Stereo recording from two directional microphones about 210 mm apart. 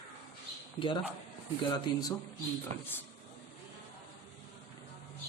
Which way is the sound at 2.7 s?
35° right (ahead or behind).